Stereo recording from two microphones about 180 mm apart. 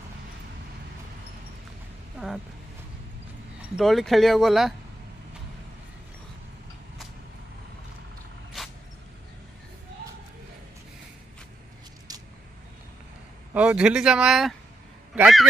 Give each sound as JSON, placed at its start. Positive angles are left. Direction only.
{"t": 2.1, "sound": "vehicle", "side_deg": 0}
{"t": 3.7, "sound": "speech", "side_deg": 0}
{"t": 12.1, "sound": "vehicle", "side_deg": -20}
{"t": 13.5, "sound": "speech", "side_deg": -5}